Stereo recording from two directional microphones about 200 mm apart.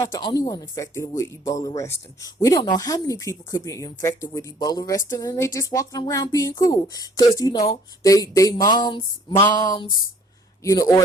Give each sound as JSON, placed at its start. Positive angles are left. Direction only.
{"t": 0.0, "sound": "speech", "side_deg": 20}